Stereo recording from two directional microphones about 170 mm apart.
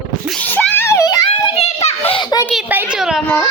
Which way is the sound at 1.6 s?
40° left (ahead or behind).